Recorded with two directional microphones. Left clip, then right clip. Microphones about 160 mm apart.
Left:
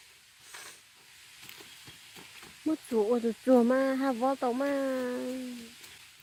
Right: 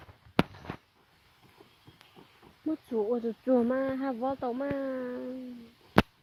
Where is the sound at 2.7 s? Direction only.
45° left (ahead or behind).